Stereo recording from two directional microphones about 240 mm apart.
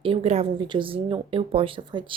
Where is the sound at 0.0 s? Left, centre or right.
Right.